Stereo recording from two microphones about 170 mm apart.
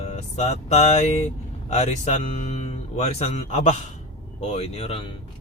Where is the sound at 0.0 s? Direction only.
40° left (ahead or behind).